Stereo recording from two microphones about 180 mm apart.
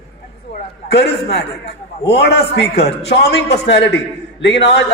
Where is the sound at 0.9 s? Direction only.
70° left (ahead or behind).